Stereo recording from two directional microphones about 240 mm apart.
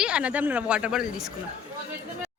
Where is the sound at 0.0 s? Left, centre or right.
Centre.